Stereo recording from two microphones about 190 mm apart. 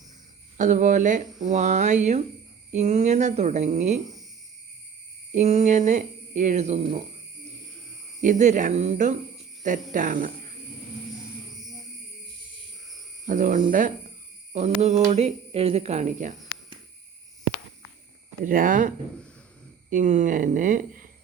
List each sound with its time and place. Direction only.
0.5 s speech: 40° right (ahead or behind)
5.3 s speech: 35° right (ahead or behind)
8.2 s speech: 40° right (ahead or behind)
13.2 s speech: 40° right (ahead or behind)
18.4 s speech: 45° right (ahead or behind)